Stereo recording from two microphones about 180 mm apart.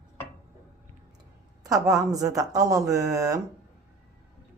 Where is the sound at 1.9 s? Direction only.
20° right (ahead or behind).